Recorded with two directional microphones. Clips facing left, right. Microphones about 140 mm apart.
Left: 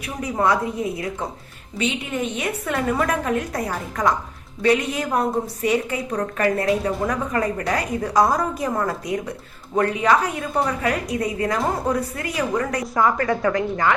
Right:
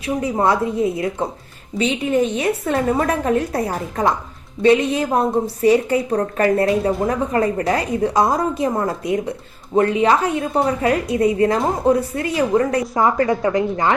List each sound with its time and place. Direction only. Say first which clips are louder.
0.0 s a woman's voice: right 4 dB; 30° right (ahead or behind)